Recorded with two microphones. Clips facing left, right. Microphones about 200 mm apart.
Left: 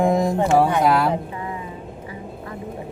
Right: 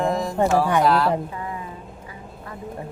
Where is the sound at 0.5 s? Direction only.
55° left (ahead or behind).